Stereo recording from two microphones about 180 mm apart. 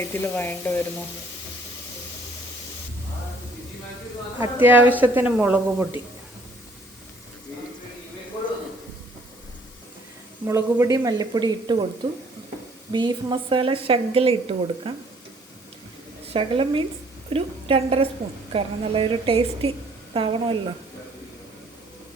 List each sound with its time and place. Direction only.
0.0 s speech: 10° left (ahead or behind)
4.6 s speech: 10° right (ahead or behind)
10.4 s a woman's voice: 15° right (ahead or behind)
12.9 s a woman's voice: 25° right (ahead or behind)
16.3 s a woman's voice: 30° right (ahead or behind)